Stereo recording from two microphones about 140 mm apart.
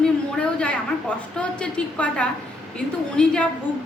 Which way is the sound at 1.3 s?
5° left (ahead or behind).